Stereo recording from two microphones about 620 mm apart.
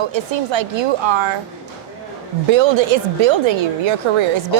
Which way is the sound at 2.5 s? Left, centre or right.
Right.